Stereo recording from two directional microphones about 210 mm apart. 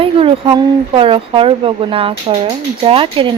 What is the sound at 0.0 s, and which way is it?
Speech, 25° right (ahead or behind).